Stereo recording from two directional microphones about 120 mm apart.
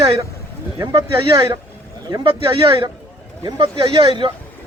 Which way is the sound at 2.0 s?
35° right (ahead or behind).